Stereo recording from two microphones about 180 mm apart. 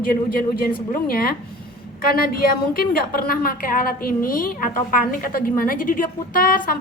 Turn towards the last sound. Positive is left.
turn(degrees=55)  # may be behind; listen again after turning